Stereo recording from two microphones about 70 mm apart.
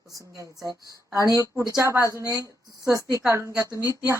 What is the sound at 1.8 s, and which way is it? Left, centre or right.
Speech, right.